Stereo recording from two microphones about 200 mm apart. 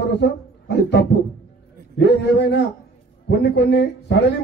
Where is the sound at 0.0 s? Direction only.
55° left (ahead or behind).